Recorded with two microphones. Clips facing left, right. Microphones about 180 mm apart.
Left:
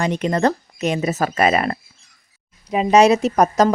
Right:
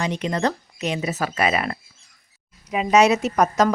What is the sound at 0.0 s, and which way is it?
Speech, 50° left (ahead or behind).